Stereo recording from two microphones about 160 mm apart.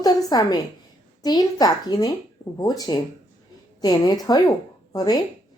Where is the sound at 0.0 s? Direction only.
25° left (ahead or behind).